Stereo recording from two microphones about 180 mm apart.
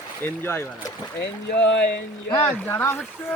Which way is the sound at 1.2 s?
80° left.